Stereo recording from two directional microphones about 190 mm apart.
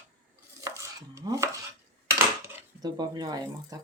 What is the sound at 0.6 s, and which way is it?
Dishes, 15° right (ahead or behind).